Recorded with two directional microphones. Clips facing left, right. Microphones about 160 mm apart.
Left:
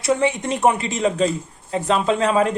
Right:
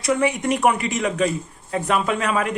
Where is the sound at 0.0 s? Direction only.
25° left (ahead or behind).